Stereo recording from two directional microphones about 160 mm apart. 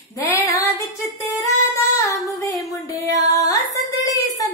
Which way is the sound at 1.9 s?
20° left (ahead or behind).